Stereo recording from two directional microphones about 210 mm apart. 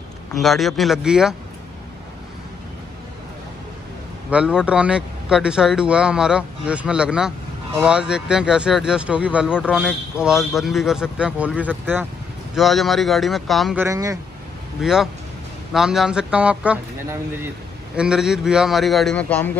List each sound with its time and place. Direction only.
0.3 s speech: centre (ahead or behind)
4.3 s speech: 5° right (ahead or behind)
13.8 s speech: 15° right (ahead or behind)
14.8 s speech: centre (ahead or behind)